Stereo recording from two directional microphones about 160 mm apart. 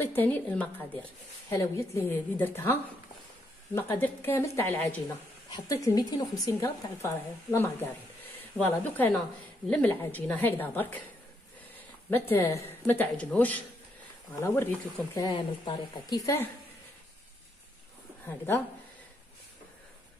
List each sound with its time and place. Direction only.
0.0 s speech: 10° left (ahead or behind)
5.5 s a woman's voice: 25° left (ahead or behind)
12.1 s speech: 15° left (ahead or behind)
15.2 s a woman's voice: 25° left (ahead or behind)